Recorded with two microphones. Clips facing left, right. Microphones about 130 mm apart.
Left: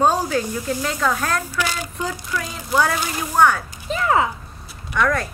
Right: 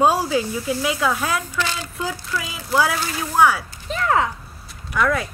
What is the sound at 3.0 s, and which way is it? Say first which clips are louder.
Speech: left 1 dB; 15° left (ahead or behind).